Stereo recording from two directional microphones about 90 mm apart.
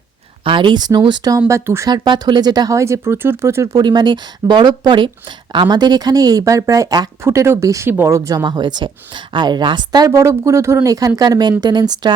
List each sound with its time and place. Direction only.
0.4 s speech: 65° right (ahead or behind)
1.5 s speech: 30° right (ahead or behind)
1.9 s speech: 50° right (ahead or behind)
2.7 s speech: 35° right (ahead or behind)
3.8 s speech: 55° right (ahead or behind)
7.3 s speech: 30° right (ahead or behind)
8.4 s speech: 55° right (ahead or behind)
10.1 s speech: 35° right (ahead or behind); by 12.1 s 55° right (ahead or behind)